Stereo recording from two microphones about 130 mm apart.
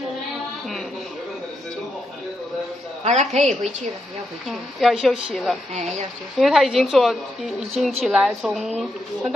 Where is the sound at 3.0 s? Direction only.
65° right (ahead or behind).